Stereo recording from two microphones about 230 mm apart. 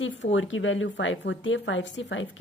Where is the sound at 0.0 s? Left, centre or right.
Left.